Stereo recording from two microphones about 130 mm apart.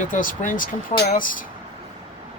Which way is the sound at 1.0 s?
75° left (ahead or behind).